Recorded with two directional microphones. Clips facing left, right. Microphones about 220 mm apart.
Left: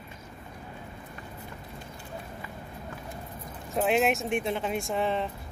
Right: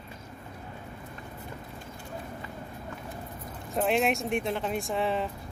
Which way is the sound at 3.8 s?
Centre (ahead or behind).